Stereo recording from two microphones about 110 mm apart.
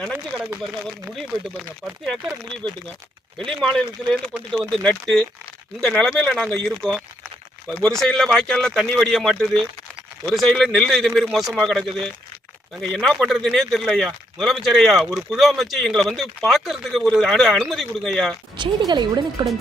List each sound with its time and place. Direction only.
1.1 s speech: 5° left (ahead or behind)
3.3 s speech: 5° left (ahead or behind)
4.8 s speech: 10° left (ahead or behind)
10.3 s speech: centre (ahead or behind)
18.5 s speech: 40° right (ahead or behind)